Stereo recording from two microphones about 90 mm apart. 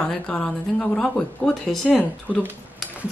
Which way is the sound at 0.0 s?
10° left (ahead or behind).